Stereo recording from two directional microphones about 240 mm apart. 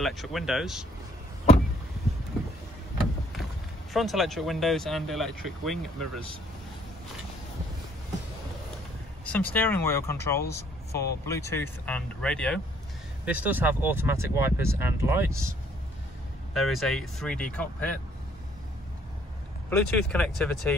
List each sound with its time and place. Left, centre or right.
0.0 s speech: centre
3.9 s speech: centre
9.3 s speech: centre
10.4 s a sound: left
11.0 s speech: centre
16.5 s speech: centre
19.7 s speech: centre